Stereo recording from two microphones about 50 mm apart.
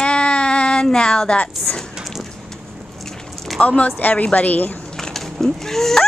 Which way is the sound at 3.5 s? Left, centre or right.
Left.